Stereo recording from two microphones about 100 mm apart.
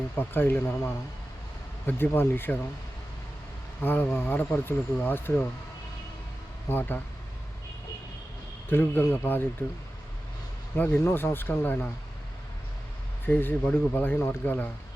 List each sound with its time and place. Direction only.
0.2 s speech: 20° left (ahead or behind)
1.9 s speech: 20° left (ahead or behind)
3.8 s speech: 15° left (ahead or behind)
6.7 s speech: 20° left (ahead or behind)
8.7 s speech: 20° left (ahead or behind)
10.8 s speech: 20° left (ahead or behind)
13.2 s speech: 20° left (ahead or behind)